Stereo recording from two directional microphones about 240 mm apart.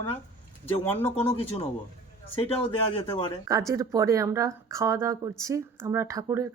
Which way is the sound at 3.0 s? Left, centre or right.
Centre.